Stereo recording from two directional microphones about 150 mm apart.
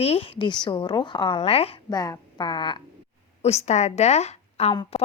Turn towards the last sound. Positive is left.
turn(degrees=45)  # may be behind; listen again after turning